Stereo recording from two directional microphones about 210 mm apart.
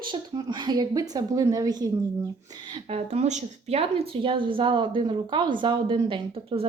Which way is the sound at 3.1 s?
35° right (ahead or behind).